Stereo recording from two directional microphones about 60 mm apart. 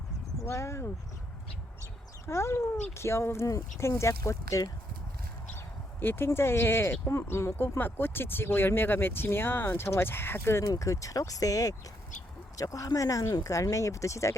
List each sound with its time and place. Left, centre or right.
0.4 s speech: left
2.2 s speech: left
5.5 s speech: left
10.6 s speech: left
12.5 s speech: left